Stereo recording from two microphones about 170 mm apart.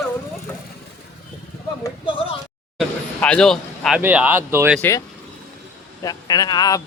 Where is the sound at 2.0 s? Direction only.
30° left (ahead or behind).